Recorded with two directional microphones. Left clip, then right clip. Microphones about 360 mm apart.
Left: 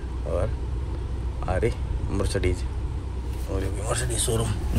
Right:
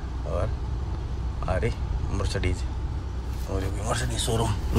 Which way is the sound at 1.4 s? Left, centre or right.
Centre.